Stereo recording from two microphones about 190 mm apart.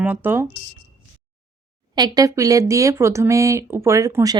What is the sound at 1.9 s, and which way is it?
Speech, 20° right (ahead or behind).